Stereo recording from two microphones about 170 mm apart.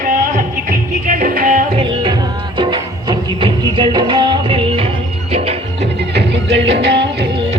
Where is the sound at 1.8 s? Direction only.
25° right (ahead or behind).